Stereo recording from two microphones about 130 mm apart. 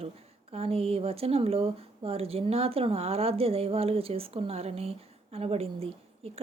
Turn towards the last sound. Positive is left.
turn(degrees=-50)  # may be behind; listen again after turning